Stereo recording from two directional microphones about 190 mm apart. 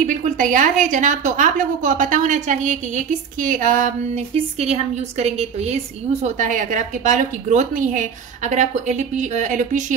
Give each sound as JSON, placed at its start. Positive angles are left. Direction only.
{"t": 0.0, "sound": "a woman's voice", "side_deg": -45}